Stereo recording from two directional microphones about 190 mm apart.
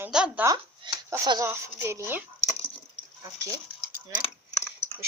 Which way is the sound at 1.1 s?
15° right (ahead or behind).